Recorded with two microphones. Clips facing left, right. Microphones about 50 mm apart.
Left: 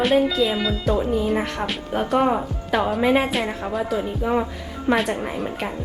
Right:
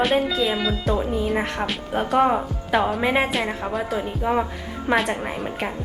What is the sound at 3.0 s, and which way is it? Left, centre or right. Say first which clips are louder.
Speech: left 2 dB; right.